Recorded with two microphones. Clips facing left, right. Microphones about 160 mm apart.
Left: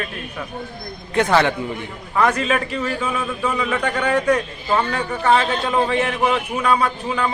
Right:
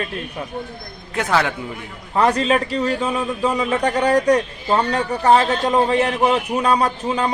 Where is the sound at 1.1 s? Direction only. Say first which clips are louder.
Left 3 dB; 5° right (ahead or behind).